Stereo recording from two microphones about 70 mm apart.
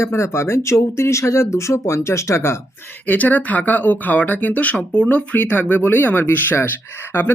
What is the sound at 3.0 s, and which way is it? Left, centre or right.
Speech, left.